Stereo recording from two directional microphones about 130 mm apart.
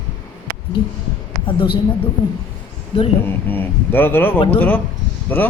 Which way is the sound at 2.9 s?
45° left (ahead or behind).